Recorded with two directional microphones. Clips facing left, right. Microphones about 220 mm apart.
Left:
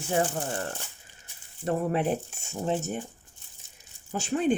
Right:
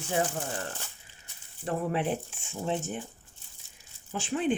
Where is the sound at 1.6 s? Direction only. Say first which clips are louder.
Left 3 dB; 40° left (ahead or behind).